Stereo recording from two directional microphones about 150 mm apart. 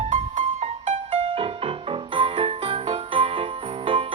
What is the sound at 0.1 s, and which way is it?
Music, 50° right (ahead or behind).